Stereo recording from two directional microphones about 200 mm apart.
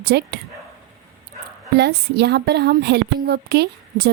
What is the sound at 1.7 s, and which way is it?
A woman's voice, 55° right (ahead or behind).